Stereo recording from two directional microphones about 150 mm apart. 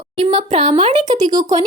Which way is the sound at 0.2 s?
35° right (ahead or behind).